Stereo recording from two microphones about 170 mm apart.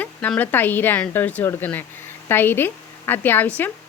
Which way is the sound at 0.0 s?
10° left (ahead or behind).